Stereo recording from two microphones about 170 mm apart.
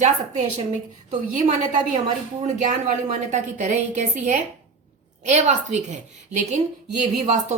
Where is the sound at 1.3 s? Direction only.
50° right (ahead or behind).